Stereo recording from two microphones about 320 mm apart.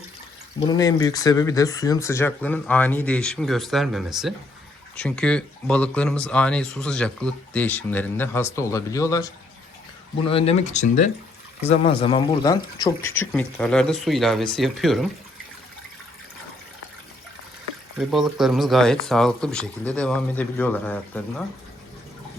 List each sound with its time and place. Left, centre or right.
0.7 s speech: centre
17.9 s speech: centre